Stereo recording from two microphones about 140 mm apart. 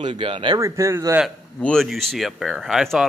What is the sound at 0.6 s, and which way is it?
Speech, 20° right (ahead or behind).